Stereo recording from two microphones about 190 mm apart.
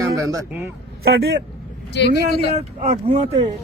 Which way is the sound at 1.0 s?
55° right (ahead or behind).